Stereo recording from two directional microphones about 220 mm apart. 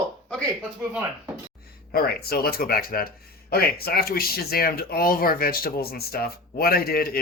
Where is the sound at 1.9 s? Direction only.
45° left (ahead or behind).